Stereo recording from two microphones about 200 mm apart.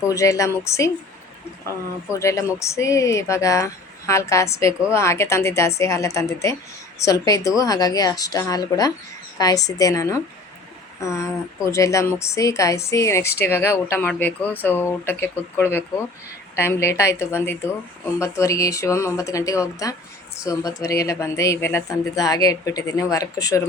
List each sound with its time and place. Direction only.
0.1 s a woman's voice: 15° left (ahead or behind)
2.1 s a woman's voice: 15° left (ahead or behind)